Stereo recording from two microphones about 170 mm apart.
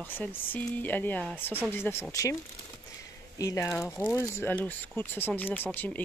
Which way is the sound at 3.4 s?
20° left (ahead or behind).